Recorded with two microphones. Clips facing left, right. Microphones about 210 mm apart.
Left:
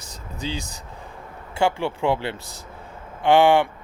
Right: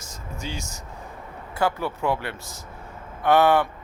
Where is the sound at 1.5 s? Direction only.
25° left (ahead or behind).